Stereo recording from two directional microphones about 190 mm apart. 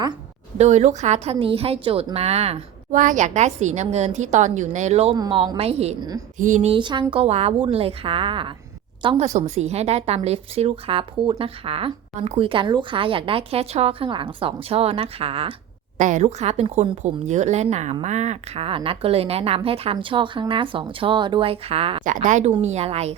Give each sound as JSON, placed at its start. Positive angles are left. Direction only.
{"t": 0.6, "sound": "a woman's voice", "side_deg": -35}
{"t": 5.1, "sound": "a woman's voice", "side_deg": -25}
{"t": 22.0, "sound": "a woman's voice", "side_deg": -45}